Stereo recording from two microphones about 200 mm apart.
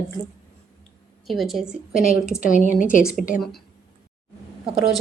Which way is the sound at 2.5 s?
40° left (ahead or behind).